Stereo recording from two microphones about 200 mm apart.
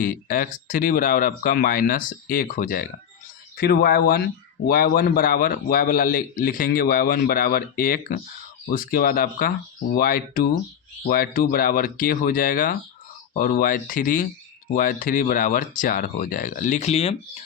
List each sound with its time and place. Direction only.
0.0 s speech: 45° left (ahead or behind)